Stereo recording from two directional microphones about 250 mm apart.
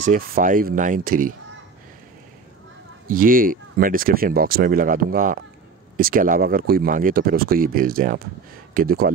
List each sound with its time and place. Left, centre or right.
0.0 s speech: right
3.1 s speech: right